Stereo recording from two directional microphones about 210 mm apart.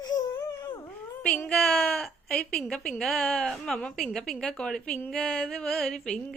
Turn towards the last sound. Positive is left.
turn(degrees=5)  # may be behind; listen again after turning